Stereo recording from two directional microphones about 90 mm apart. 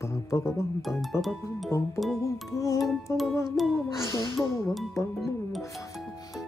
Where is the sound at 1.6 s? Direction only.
35° left (ahead or behind).